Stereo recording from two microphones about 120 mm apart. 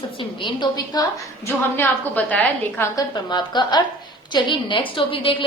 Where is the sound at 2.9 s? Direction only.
35° left (ahead or behind).